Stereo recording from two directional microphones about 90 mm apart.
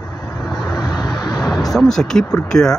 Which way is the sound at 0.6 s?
40° left (ahead or behind).